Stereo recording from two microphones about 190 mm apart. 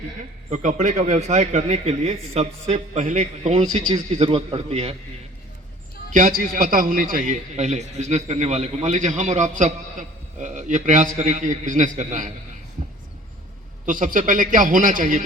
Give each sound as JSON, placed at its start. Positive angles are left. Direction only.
{"t": 0.5, "sound": "a man's voice", "side_deg": -40}
{"t": 6.1, "sound": "a man's voice", "side_deg": -50}
{"t": 13.8, "sound": "a man's voice", "side_deg": -45}